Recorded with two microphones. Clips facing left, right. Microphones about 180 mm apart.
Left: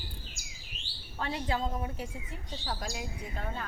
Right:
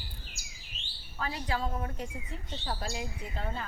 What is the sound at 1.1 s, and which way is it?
Speech, 25° left (ahead or behind).